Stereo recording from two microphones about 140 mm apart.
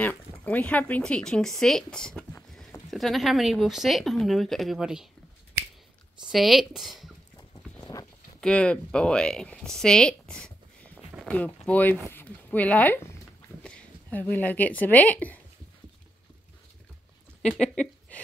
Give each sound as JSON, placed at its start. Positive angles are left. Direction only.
{"t": 0.0, "sound": "speech", "side_deg": 15}
{"t": 6.3, "sound": "speech", "side_deg": 0}
{"t": 7.8, "sound": "livestock", "side_deg": 25}
{"t": 8.4, "sound": "speech", "side_deg": 10}
{"t": 11.0, "sound": "a sound", "side_deg": -5}
{"t": 11.2, "sound": "a woman's voice", "side_deg": 10}
{"t": 17.4, "sound": "speech", "side_deg": 5}